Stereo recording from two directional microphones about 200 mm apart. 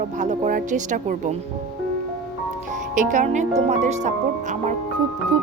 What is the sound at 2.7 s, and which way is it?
Speech, 40° right (ahead or behind).